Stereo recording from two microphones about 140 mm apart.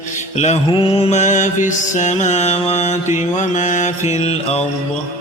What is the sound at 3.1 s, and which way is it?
Mantra, 60° left (ahead or behind).